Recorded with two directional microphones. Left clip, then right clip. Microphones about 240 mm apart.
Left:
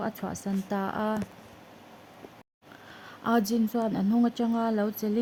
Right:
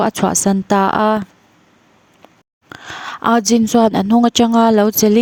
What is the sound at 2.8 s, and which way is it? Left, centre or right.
Speech, right.